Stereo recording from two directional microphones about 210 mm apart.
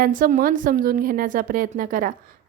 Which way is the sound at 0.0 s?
40° right (ahead or behind).